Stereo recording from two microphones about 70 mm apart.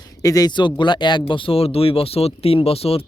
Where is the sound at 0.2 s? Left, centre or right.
Left.